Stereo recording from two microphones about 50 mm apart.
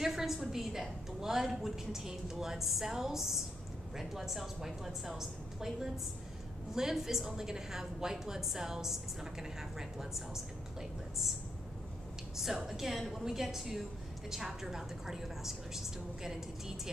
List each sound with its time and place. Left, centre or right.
0.0 s a woman's voice: centre
12.6 s a woman's voice: centre